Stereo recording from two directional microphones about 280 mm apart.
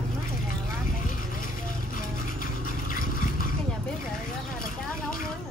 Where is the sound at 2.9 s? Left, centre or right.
Left.